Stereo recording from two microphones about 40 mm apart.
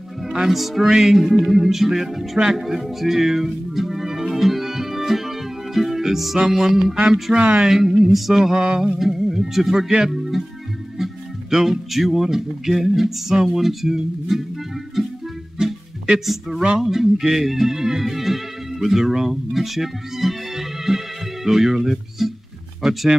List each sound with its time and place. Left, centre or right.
0.2 s music: centre
0.5 s music: centre
7.3 s a sound: right
7.6 s music: centre
8.5 s a sound: right
9.0 s music: centre
9.8 s speech: centre
11.0 s music: centre
15.6 s music: centre
16.3 s music: centre
16.8 s speech: centre
22.8 s music: centre